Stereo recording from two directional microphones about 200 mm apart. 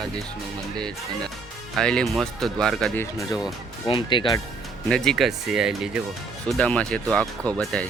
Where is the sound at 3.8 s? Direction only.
25° left (ahead or behind).